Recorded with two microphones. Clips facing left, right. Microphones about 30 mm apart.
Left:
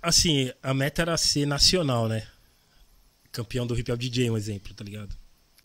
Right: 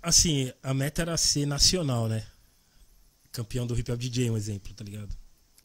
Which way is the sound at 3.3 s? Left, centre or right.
Left.